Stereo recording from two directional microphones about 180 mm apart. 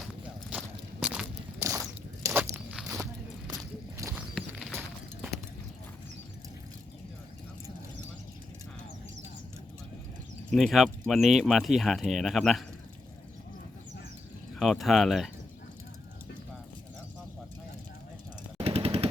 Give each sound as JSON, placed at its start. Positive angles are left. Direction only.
{"t": 0.5, "sound": "walk", "side_deg": -5}
{"t": 2.9, "sound": "a sound", "side_deg": -20}
{"t": 3.9, "sound": "clip-clop", "side_deg": -15}
{"t": 4.4, "sound": "clip-clop", "side_deg": 0}
{"t": 10.5, "sound": "speech", "side_deg": 0}
{"t": 14.5, "sound": "speech", "side_deg": 0}
{"t": 18.5, "sound": "machine gun", "side_deg": -35}